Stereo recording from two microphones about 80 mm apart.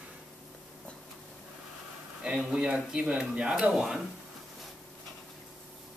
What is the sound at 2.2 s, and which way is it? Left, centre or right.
A man's voice, centre.